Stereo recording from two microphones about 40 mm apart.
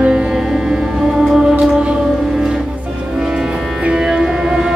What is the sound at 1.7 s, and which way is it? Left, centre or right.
Music, right.